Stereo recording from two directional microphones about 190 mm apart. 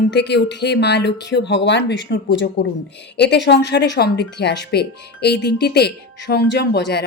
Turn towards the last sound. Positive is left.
turn(degrees=60)  # may be behind; listen again after turning